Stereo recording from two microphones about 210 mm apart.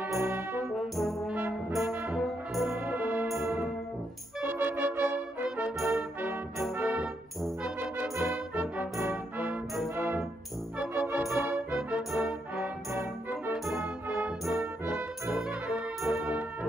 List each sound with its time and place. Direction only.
0.0 s brass instrument: 10° right (ahead or behind)
8.5 s music: 5° right (ahead or behind)
14.6 s brass instrument: 5° right (ahead or behind)